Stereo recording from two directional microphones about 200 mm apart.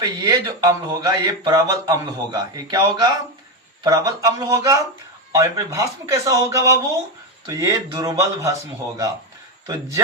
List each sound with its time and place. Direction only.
0.0 s a man's voice: 15° right (ahead or behind)